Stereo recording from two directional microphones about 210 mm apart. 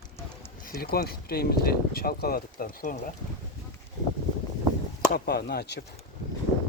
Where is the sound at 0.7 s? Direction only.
45° left (ahead or behind).